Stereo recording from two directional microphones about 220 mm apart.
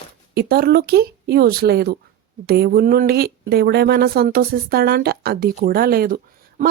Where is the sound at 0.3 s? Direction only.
45° right (ahead or behind).